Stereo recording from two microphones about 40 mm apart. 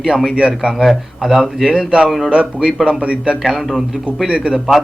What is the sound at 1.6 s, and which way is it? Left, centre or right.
A man's voice, centre.